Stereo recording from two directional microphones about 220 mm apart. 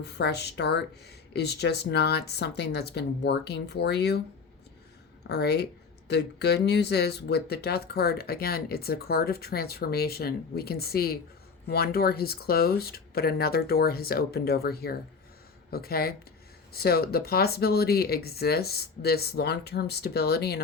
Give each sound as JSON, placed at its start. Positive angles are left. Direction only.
{"t": 0.0, "sound": "speech", "side_deg": 50}
{"t": 5.3, "sound": "speech", "side_deg": 50}